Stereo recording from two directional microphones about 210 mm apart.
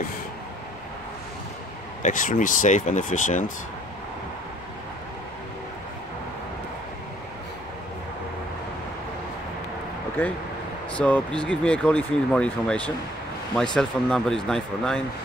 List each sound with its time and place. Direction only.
2.0 s speech: 35° left (ahead or behind)
10.2 s speech: 10° left (ahead or behind)